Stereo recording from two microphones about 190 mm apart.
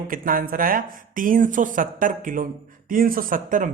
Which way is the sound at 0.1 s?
45° right (ahead or behind).